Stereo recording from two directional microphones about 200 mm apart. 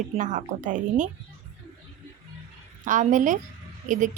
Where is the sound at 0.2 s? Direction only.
40° right (ahead or behind).